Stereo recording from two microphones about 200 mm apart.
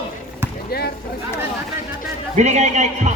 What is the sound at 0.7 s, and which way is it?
Speech, 50° left (ahead or behind).